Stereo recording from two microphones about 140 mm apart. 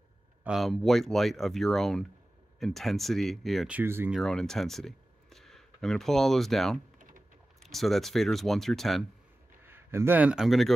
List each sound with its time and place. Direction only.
0.4 s speech: 5° right (ahead or behind)
3.7 s speech: 15° right (ahead or behind)
4.1 s speech: 5° left (ahead or behind)
7.0 s typing: 70° right (ahead or behind)
7.6 s speech: centre (ahead or behind)
9.7 s speech: 15° right (ahead or behind); by 10.7 s centre (ahead or behind)